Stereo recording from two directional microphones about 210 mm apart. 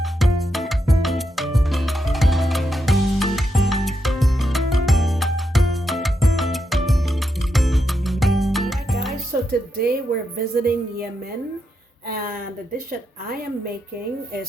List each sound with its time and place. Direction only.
0.0 s music: centre (ahead or behind)
9.5 s speech: 45° right (ahead or behind)